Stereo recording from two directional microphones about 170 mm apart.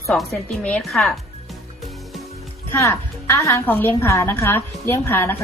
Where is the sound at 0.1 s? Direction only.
5° left (ahead or behind).